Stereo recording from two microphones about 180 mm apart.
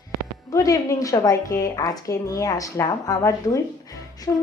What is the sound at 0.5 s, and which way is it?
A woman's voice, 15° left (ahead or behind).